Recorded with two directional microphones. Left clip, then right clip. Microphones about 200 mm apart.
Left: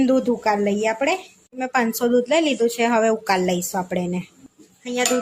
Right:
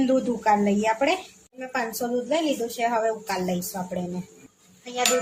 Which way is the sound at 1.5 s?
50° left (ahead or behind).